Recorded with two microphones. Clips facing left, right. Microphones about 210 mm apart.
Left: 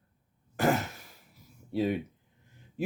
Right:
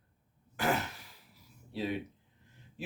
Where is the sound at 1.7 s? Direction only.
50° left (ahead or behind).